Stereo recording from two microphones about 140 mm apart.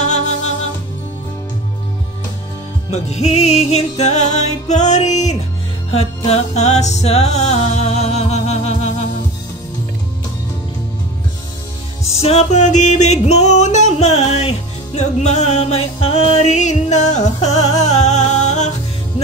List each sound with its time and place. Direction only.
2.9 s music: 50° left (ahead or behind)
5.9 s music: 45° left (ahead or behind)
12.1 s music: 50° left (ahead or behind)